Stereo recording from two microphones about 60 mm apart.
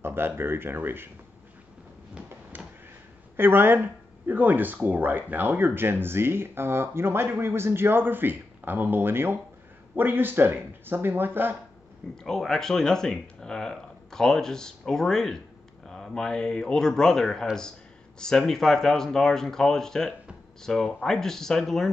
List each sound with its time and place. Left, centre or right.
0.0 s speech: right
2.5 s a sound: right
3.3 s speech: right
12.2 s speech: centre